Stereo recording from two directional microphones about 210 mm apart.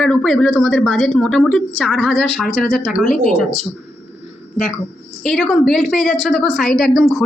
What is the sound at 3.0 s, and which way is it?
Speech, 40° left (ahead or behind).